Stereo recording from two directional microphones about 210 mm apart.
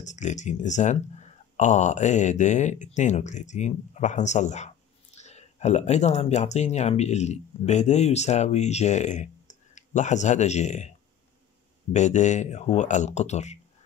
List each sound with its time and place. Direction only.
0.0 s speech: 35° left (ahead or behind)
11.9 s speech: 35° left (ahead or behind)